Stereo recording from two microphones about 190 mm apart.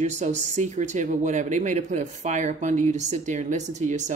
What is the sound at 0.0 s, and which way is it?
Speech, 40° right (ahead or behind).